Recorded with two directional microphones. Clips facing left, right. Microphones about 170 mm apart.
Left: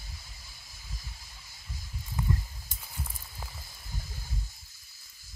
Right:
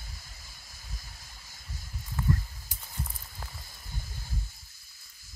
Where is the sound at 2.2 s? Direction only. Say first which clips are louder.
Right 3 dB; 15° left (ahead or behind).